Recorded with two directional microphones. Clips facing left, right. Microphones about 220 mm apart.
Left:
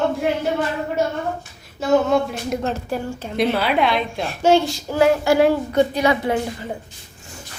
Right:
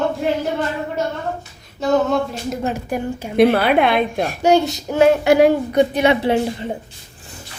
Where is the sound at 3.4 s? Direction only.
55° right (ahead or behind).